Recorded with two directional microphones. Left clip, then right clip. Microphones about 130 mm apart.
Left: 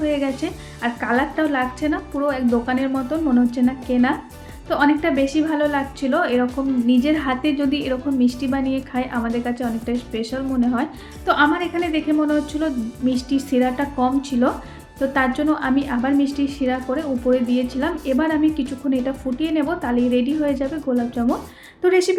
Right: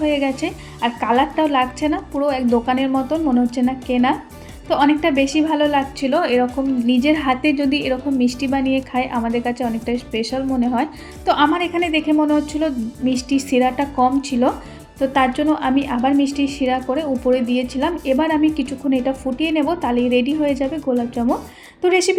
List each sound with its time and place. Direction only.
0.0 s a woman's voice: 15° right (ahead or behind)
20.9 s a woman's voice: 15° right (ahead or behind)